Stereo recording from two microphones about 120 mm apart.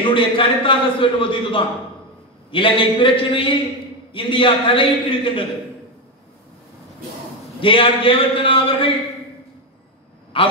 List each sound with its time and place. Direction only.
0.0 s a man's voice: 45° left (ahead or behind)
7.6 s speech: 45° left (ahead or behind)
10.3 s a man's voice: 45° left (ahead or behind)